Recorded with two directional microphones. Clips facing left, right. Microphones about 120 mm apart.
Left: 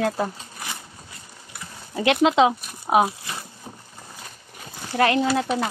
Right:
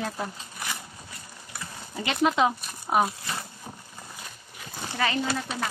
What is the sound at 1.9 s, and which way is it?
Speech, 75° left (ahead or behind).